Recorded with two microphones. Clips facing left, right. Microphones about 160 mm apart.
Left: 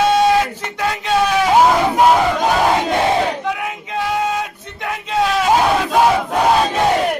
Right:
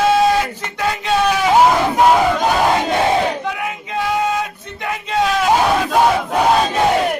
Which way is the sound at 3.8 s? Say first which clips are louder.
Right 1 dB; centre (ahead or behind).